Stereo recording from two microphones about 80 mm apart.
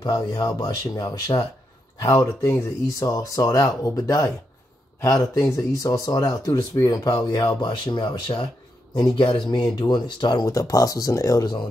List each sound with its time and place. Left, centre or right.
0.0 s speech: left
2.0 s speech: left
7.6 s speech: left
9.6 s speech: left